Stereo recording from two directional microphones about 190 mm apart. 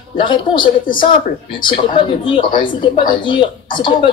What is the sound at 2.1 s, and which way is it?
Speech, 25° left (ahead or behind).